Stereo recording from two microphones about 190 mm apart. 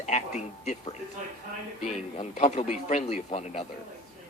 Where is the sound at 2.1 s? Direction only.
35° left (ahead or behind).